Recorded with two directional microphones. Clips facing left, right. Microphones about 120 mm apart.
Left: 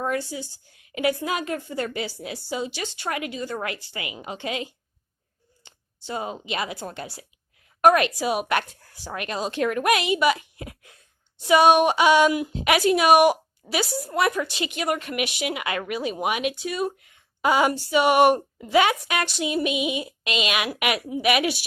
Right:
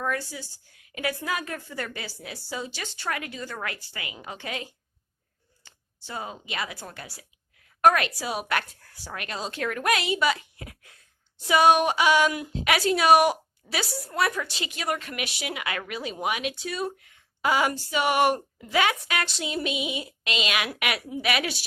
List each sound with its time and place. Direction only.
0.0 s a woman's voice: 20° left (ahead or behind)